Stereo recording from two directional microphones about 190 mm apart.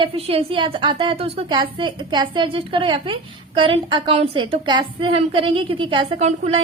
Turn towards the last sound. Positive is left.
turn(degrees=-35)  # may be behind; listen again after turning